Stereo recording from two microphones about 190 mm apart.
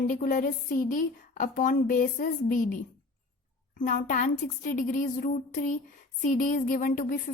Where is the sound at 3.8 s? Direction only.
45° left (ahead or behind).